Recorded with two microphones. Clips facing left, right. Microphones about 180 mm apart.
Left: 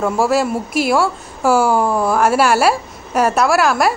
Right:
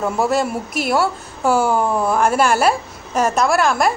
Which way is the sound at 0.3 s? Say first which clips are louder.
Left 3 dB; 5° left (ahead or behind).